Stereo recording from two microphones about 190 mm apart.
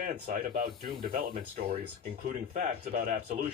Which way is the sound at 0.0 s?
50° right (ahead or behind).